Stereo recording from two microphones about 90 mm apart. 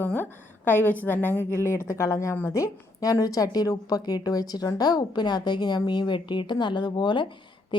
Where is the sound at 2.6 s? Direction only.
40° left (ahead or behind).